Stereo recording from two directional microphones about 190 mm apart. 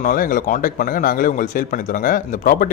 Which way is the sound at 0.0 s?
45° left (ahead or behind).